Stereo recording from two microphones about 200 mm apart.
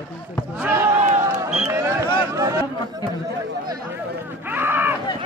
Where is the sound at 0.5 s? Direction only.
10° right (ahead or behind).